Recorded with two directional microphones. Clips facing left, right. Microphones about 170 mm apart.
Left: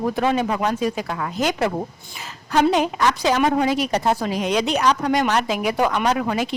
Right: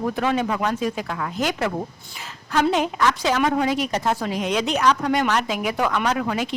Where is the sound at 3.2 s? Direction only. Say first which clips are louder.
Left 4 dB; 35° left (ahead or behind).